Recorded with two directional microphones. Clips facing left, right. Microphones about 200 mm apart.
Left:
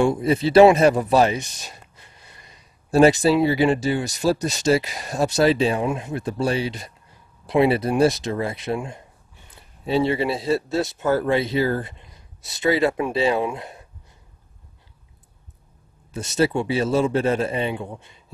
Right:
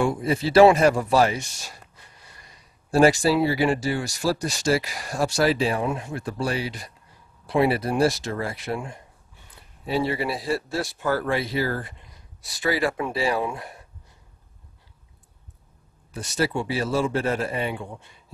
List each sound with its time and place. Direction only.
0.0 s speech: 25° left (ahead or behind)
16.1 s speech: 25° left (ahead or behind)